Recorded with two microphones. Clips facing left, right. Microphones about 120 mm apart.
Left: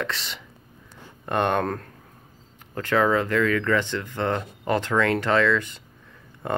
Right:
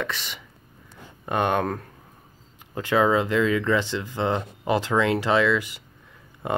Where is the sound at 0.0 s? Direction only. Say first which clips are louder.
Even; centre (ahead or behind).